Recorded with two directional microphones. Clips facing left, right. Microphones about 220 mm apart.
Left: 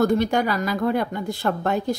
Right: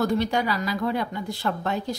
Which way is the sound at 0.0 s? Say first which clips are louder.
Left 4 dB; 50° left (ahead or behind).